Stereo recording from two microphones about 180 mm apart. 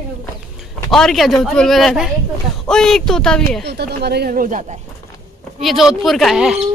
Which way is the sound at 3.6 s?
65° right (ahead or behind).